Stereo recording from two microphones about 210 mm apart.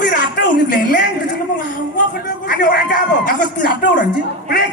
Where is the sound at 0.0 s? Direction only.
45° left (ahead or behind).